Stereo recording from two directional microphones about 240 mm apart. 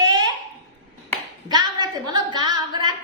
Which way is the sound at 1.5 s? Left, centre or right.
Centre.